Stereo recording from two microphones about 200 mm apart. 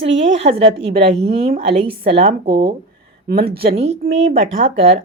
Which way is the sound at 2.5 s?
45° right (ahead or behind).